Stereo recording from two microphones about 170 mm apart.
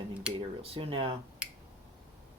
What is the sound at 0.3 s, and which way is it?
Speech, 30° right (ahead or behind).